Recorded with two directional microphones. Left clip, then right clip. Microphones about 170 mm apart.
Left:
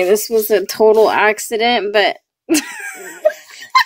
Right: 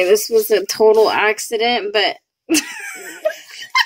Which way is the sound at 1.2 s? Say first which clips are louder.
Left 2 dB; 30° left (ahead or behind).